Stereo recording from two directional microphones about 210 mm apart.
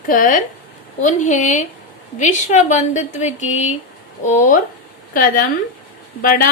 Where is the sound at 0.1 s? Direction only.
40° left (ahead or behind).